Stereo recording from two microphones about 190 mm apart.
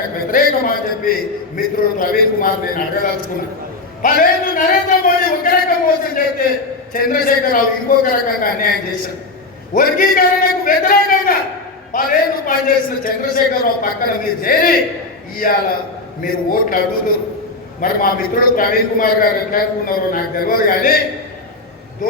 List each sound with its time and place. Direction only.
0.3 s a man's voice: 45° left (ahead or behind)
1.5 s a man's voice: 45° left (ahead or behind)
9.7 s a man's voice: 50° left (ahead or behind)